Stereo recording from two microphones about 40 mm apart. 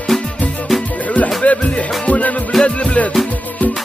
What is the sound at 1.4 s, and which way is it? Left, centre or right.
Music, left.